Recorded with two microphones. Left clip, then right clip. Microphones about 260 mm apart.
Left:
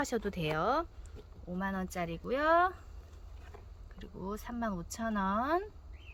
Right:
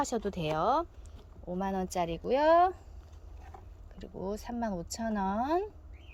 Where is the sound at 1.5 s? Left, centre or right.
Centre.